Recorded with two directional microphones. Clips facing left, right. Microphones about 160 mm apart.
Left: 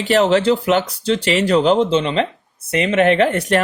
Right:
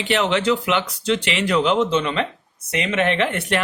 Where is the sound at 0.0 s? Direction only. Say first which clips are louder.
Left 6 dB; 40° left (ahead or behind).